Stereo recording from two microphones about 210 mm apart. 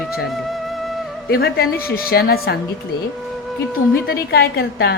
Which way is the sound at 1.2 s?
45° left (ahead or behind).